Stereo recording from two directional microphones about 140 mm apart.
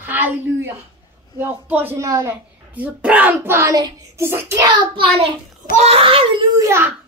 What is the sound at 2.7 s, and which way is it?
Speech, 10° right (ahead or behind).